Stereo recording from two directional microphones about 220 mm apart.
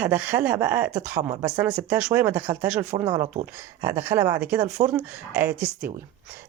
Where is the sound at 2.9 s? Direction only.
20° right (ahead or behind).